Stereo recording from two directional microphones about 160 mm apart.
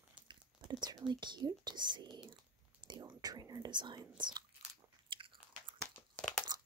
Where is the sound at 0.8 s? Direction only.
25° right (ahead or behind).